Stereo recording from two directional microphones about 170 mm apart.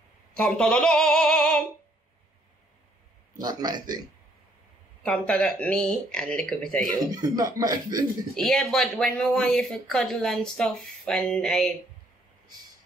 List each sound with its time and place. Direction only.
0.4 s a sound: 5° left (ahead or behind)
3.3 s speech: 25° right (ahead or behind)
5.0 s speech: 5° left (ahead or behind)
7.2 s speech: 20° right (ahead or behind)
8.4 s speech: centre (ahead or behind)